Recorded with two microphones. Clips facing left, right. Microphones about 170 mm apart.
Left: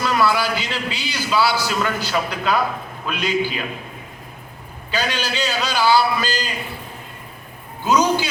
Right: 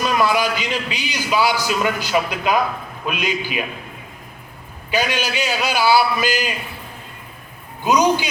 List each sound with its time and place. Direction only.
0.0 s a man's voice: 15° right (ahead or behind)
4.9 s a man's voice: 15° right (ahead or behind)
7.9 s a man's voice: 15° right (ahead or behind)